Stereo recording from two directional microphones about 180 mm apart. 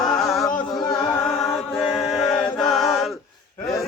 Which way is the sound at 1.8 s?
Centre (ahead or behind).